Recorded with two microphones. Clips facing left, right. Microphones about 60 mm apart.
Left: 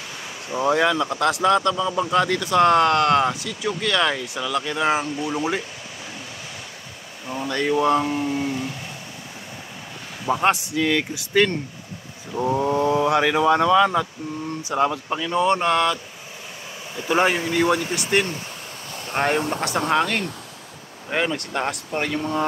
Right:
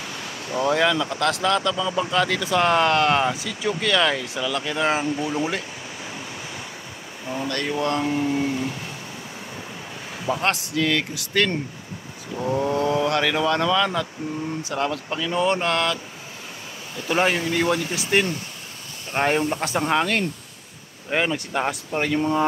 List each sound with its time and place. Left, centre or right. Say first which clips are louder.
0.5 s speech: left 1 dB; centre
7.4 s speech: left 5 dB; centre
10.2 s speech: left 4 dB; centre